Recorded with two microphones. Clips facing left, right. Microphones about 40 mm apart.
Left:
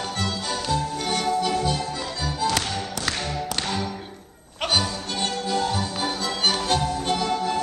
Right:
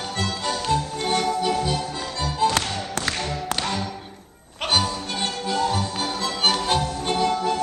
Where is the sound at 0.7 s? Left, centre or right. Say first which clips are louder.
Right 2 dB; right.